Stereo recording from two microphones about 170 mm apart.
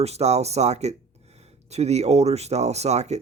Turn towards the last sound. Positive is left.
turn(degrees=-40)  # may be behind; listen again after turning